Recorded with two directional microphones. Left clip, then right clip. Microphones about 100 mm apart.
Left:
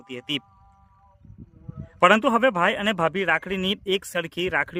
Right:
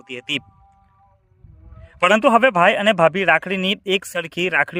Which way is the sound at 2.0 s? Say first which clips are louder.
Right 4 dB; 45° right (ahead or behind).